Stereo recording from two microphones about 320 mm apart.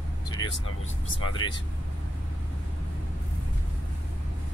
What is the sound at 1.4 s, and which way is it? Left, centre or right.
Speech, centre.